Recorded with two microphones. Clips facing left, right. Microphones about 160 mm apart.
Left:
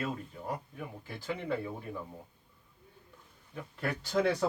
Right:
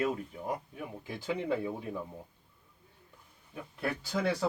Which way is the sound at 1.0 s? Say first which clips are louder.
Right 3 dB; 15° right (ahead or behind).